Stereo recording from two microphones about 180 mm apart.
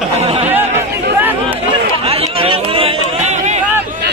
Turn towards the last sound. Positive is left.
turn(degrees=-40)  # may be behind; listen again after turning